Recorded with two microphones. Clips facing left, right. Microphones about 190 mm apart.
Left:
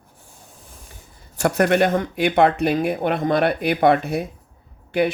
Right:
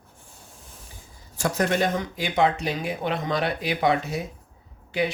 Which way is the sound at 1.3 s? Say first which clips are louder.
Left 6 dB; 60° left (ahead or behind).